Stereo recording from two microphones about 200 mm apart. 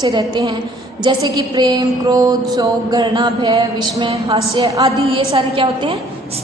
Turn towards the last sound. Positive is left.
turn(degrees=-25)  # may be behind; listen again after turning